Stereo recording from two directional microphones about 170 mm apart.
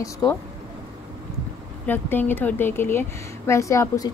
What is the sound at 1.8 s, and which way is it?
Speech, 10° left (ahead or behind).